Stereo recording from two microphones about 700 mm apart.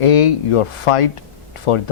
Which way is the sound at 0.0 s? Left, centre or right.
Left.